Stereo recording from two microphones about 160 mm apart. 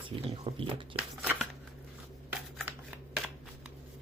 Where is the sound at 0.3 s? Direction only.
30° right (ahead or behind).